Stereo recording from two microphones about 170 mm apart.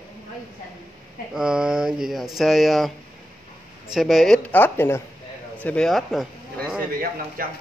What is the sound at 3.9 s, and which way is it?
Speech, centre (ahead or behind).